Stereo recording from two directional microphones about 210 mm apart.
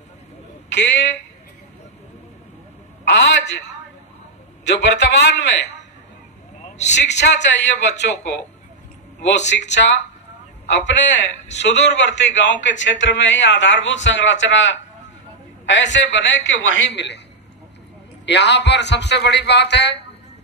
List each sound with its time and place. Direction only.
0.7 s a man's voice: 55° left (ahead or behind)
3.3 s speech: 55° left (ahead or behind)
4.6 s speech: 55° left (ahead or behind)
6.6 s vehicle: 35° left (ahead or behind)
7.0 s speech: 55° left (ahead or behind)
9.5 s speech: 55° left (ahead or behind)
18.2 s speech: 55° left (ahead or behind)